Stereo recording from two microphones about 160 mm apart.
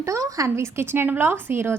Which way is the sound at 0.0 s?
20° right (ahead or behind).